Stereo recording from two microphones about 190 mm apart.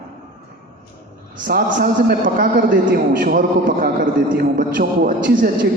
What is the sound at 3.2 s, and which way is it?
A man's voice, 50° right (ahead or behind).